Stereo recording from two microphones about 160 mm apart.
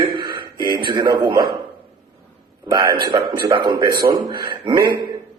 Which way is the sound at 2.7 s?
25° right (ahead or behind).